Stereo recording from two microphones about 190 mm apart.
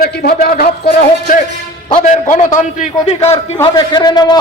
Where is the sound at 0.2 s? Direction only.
55° left (ahead or behind); by 3.2 s 35° left (ahead or behind).